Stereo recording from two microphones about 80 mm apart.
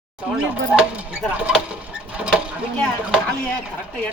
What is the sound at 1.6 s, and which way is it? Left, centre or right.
Sewing machine, centre.